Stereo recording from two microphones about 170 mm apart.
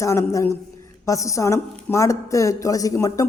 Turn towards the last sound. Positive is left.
turn(degrees=20)  # may be behind; listen again after turning